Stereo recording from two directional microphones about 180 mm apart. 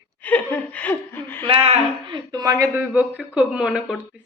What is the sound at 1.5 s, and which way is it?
Speech, 30° right (ahead or behind).